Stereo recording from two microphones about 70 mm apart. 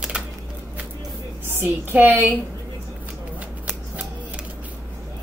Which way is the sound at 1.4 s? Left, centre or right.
Right.